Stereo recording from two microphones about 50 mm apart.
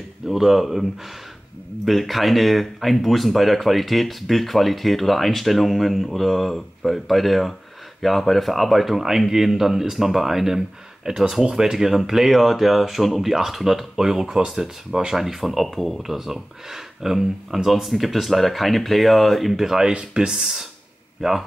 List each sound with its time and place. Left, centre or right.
0.3 s speech: centre
1.9 s speech: centre
19.9 s speech: centre